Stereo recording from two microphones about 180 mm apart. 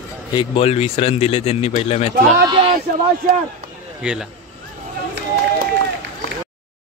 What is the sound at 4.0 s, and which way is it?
Speech, 5° right (ahead or behind).